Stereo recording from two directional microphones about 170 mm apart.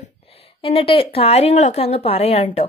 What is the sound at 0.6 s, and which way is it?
A woman's voice, 30° left (ahead or behind).